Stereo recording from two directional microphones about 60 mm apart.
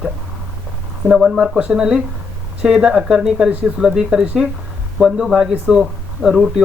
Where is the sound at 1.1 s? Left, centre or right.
Centre.